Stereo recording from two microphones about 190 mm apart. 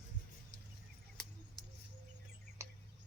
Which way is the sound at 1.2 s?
5° left (ahead or behind).